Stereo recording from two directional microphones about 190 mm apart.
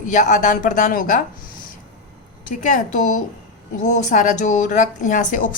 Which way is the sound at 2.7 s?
40° left (ahead or behind).